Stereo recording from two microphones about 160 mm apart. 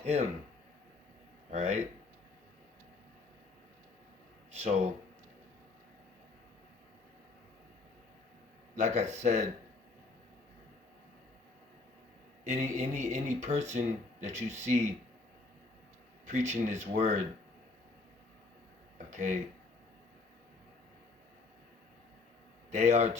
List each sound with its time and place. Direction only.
0.0 s speech: 40° right (ahead or behind)
1.5 s speech: 40° right (ahead or behind)
8.7 s speech: 45° right (ahead or behind)
12.5 s speech: 45° right (ahead or behind)
16.3 s speech: 45° right (ahead or behind)
18.9 s a sound: 50° right (ahead or behind)
22.7 s speech: 45° right (ahead or behind)